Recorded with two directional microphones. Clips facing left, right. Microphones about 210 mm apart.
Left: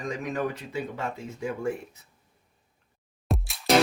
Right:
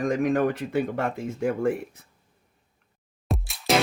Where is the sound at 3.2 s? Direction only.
Centre (ahead or behind).